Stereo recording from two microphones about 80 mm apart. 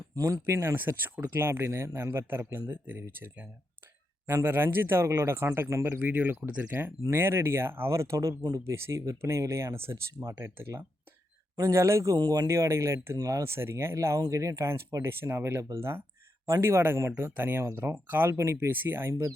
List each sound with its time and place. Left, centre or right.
0.1 s speech: right
0.4 s speech: right
4.4 s speech: right
6.0 s speech: right
8.7 s speech: right
12.1 s speech: right
12.5 s speech: right